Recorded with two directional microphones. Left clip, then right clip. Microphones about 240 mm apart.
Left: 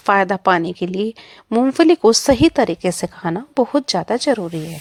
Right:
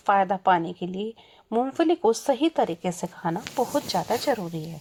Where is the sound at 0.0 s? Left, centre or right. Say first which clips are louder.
Left 6 dB; left.